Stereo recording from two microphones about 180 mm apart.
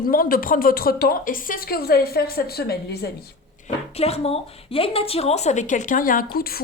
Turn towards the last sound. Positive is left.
turn(degrees=55)  # may be behind; listen again after turning